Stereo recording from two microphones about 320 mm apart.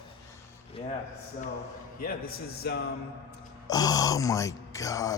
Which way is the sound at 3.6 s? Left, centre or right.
Centre.